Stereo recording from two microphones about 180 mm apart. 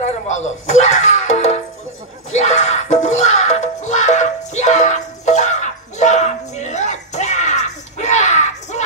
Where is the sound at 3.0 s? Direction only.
40° left (ahead or behind).